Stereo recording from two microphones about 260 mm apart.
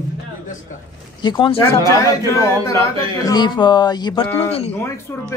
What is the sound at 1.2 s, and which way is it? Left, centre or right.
Speech, centre.